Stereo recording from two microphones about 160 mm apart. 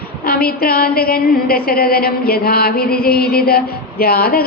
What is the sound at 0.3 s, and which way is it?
A woman's voice, 65° left (ahead or behind).